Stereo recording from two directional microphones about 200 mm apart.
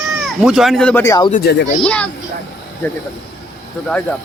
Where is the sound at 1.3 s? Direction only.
55° left (ahead or behind).